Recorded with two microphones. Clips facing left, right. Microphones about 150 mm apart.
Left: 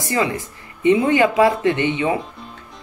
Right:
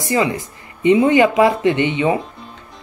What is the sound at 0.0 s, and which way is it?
Speech, 20° right (ahead or behind).